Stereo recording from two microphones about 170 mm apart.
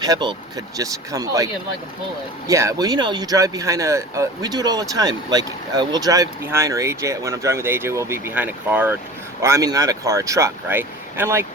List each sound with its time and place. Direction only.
0.0 s speech: 25° right (ahead or behind)
2.5 s speech: 20° right (ahead or behind)